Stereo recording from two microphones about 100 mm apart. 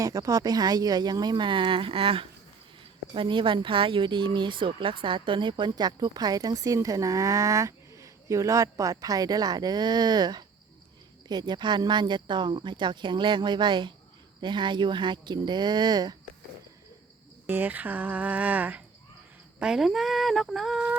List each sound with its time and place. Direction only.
0.0 s speech: 35° right (ahead or behind); by 2.2 s 70° right (ahead or behind)
3.2 s speech: 55° right (ahead or behind)
17.4 s speech: 20° right (ahead or behind); by 20.8 s centre (ahead or behind)